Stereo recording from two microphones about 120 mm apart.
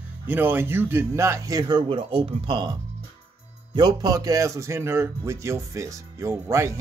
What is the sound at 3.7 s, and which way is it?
A man's voice, 35° right (ahead or behind).